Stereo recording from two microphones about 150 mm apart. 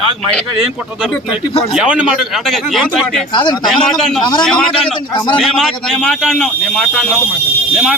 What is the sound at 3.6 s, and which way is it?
A man's voice, centre (ahead or behind).